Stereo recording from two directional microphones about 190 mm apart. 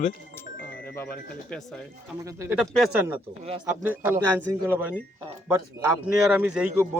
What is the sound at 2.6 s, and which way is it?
Speech, centre (ahead or behind).